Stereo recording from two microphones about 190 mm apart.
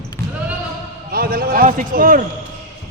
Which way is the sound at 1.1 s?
50° right (ahead or behind).